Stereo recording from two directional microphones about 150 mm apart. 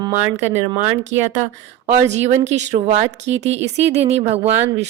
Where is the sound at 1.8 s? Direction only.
50° right (ahead or behind).